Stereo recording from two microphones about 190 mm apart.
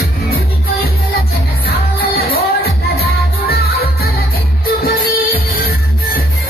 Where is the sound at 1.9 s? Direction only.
55° left (ahead or behind).